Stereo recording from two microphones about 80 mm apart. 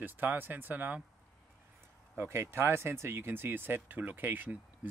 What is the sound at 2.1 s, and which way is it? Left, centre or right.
Speech, right.